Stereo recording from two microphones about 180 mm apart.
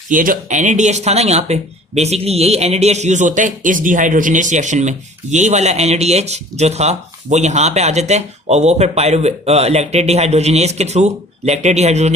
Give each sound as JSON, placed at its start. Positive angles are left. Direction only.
{"t": 0.1, "sound": "speech", "side_deg": -50}